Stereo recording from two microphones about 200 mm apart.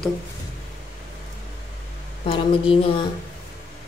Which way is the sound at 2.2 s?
25° left (ahead or behind).